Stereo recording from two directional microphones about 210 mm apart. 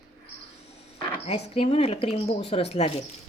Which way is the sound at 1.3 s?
30° left (ahead or behind).